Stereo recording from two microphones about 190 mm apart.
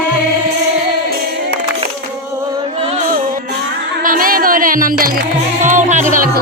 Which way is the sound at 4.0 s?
45° right (ahead or behind).